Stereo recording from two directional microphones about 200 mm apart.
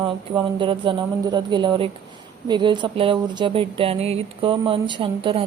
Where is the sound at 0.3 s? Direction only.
25° right (ahead or behind).